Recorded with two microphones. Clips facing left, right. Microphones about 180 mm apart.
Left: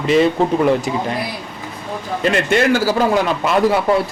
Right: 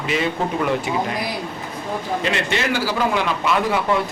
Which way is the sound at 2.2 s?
50° left (ahead or behind).